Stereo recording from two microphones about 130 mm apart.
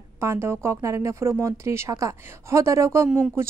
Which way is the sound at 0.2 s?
20° right (ahead or behind).